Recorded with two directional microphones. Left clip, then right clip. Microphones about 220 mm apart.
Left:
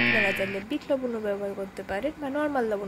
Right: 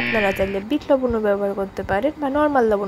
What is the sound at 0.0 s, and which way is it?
Speech, centre (ahead or behind).